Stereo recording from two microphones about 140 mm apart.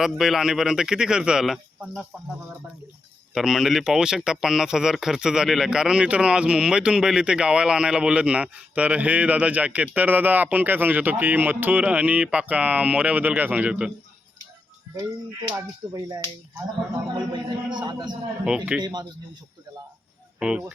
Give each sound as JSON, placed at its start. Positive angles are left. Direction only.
{"t": 0.0, "sound": "speech", "side_deg": -5}
{"t": 3.3, "sound": "speech", "side_deg": -5}
{"t": 15.4, "sound": "speech", "side_deg": -25}
{"t": 18.4, "sound": "speech", "side_deg": -5}
{"t": 18.8, "sound": "speech", "side_deg": -30}
{"t": 20.4, "sound": "speech", "side_deg": -5}